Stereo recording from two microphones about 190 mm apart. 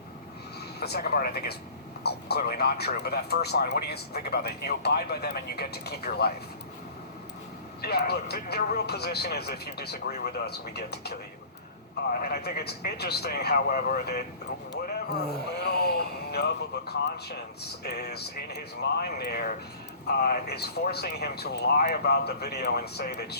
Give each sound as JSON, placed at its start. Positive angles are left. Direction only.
{"t": 0.8, "sound": "speech", "side_deg": 55}
{"t": 7.8, "sound": "speech", "side_deg": 55}